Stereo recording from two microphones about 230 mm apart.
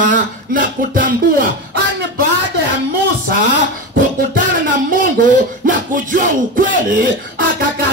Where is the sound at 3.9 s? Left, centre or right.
Right.